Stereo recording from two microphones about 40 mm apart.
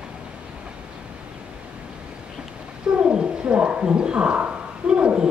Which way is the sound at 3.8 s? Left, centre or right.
Right.